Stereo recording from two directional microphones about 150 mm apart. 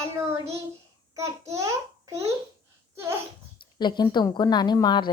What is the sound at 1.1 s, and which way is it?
A child's voice, 20° right (ahead or behind).